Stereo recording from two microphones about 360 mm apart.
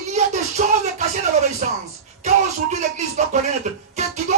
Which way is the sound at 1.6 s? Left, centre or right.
Right.